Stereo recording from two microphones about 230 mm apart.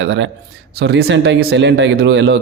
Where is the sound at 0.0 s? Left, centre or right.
Right.